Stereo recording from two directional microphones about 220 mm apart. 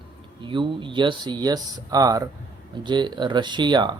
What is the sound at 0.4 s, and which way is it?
Speech, 20° right (ahead or behind).